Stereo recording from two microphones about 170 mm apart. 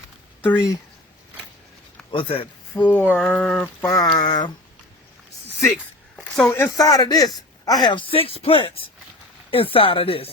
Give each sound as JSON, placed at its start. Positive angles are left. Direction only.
{"t": 0.4, "sound": "speech", "side_deg": 15}
{"t": 2.0, "sound": "speech", "side_deg": 30}
{"t": 2.8, "sound": "speech", "side_deg": 10}
{"t": 3.8, "sound": "speech", "side_deg": 20}
{"t": 5.7, "sound": "a sound", "side_deg": 0}
{"t": 6.5, "sound": "speech", "side_deg": 15}